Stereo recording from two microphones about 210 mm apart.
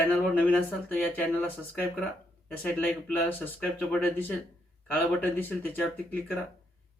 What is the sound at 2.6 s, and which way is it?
Speech, 10° left (ahead or behind).